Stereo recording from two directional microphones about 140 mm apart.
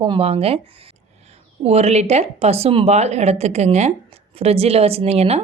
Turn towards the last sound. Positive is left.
turn(degrees=-45)  # may be behind; listen again after turning